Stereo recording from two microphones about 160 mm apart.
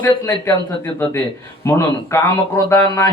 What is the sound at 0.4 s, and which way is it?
A man's voice, 15° left (ahead or behind).